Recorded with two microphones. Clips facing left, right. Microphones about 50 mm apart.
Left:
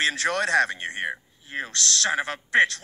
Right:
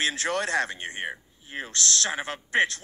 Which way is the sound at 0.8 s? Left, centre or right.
Left.